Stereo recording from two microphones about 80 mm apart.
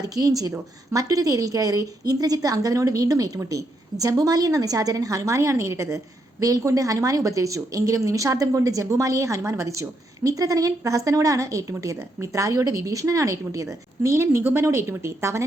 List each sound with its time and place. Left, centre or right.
0.0 s a woman's voice: right